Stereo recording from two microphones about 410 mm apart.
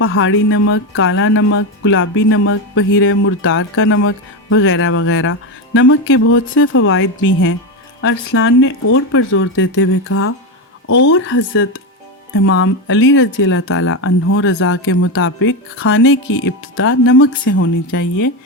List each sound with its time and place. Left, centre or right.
0.0 s speech: left